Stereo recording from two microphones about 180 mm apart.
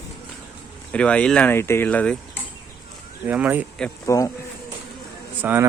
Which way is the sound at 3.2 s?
10° right (ahead or behind).